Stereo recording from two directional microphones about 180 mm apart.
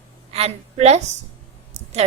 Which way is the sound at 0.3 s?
35° right (ahead or behind).